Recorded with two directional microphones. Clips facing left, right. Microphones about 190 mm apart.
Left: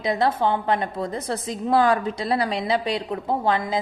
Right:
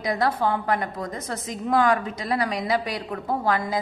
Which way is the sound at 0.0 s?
25° left (ahead or behind).